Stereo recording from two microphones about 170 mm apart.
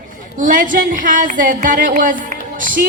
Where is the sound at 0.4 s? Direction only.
55° right (ahead or behind).